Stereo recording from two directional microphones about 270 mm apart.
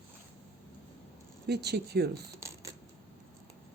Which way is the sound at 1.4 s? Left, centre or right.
Right.